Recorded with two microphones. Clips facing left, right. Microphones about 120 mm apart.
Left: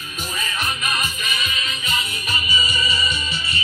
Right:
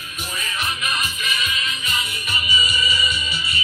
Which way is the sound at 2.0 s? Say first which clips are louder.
Left 1 dB; 45° left (ahead or behind).